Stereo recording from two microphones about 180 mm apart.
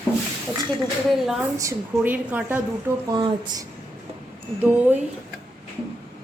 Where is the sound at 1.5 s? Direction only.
15° right (ahead or behind).